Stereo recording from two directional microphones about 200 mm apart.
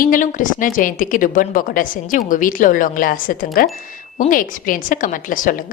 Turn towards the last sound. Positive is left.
turn(degrees=40)  # may be behind; listen again after turning